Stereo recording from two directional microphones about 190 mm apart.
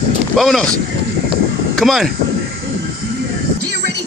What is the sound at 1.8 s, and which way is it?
Speech, centre (ahead or behind).